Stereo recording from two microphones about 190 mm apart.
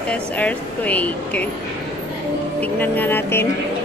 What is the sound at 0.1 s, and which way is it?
Speech, 5° left (ahead or behind).